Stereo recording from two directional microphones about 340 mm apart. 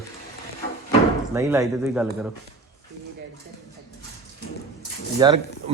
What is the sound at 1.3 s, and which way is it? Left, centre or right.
Speech, centre.